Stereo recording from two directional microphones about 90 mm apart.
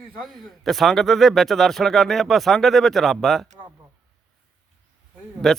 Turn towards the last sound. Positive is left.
turn(degrees=5)  # may be behind; listen again after turning